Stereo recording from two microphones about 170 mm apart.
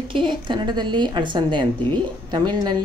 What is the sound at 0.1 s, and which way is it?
A woman's voice, 30° right (ahead or behind).